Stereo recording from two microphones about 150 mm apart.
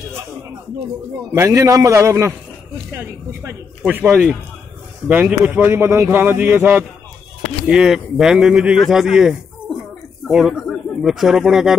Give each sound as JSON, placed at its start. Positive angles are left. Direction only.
{"t": 1.1, "sound": "a man's voice", "side_deg": -20}